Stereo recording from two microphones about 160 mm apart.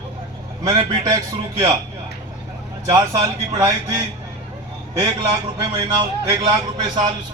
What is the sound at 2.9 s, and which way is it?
Speech, 20° right (ahead or behind).